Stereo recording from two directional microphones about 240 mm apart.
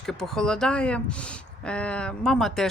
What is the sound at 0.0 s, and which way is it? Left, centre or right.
Speech, centre.